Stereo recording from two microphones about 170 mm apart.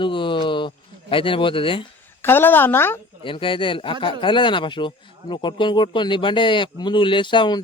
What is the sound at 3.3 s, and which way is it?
Speech, 30° left (ahead or behind).